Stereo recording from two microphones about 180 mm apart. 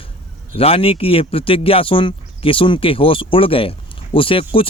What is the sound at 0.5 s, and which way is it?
A man's voice, 30° left (ahead or behind).